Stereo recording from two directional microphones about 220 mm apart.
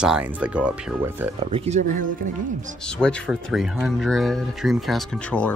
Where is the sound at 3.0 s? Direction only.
Centre (ahead or behind).